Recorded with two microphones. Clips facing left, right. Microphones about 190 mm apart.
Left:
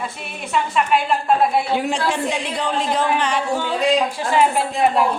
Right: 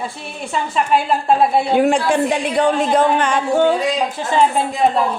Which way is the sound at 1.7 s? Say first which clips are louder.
Right 6 dB; 55° right (ahead or behind).